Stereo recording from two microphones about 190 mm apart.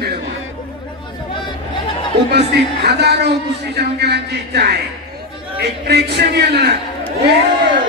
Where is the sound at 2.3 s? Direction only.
60° right (ahead or behind).